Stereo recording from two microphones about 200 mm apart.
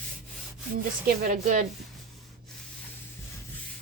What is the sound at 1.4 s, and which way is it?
Speech, 40° right (ahead or behind).